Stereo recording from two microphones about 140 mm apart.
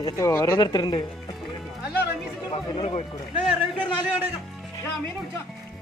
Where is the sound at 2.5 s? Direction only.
45° left (ahead or behind).